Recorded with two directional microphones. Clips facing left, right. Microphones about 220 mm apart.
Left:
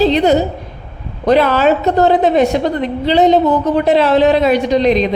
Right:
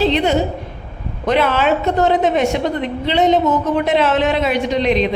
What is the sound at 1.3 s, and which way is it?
A woman's voice, 40° left (ahead or behind).